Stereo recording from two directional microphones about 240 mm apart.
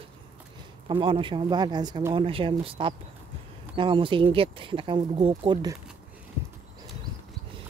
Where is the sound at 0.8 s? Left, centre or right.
Right.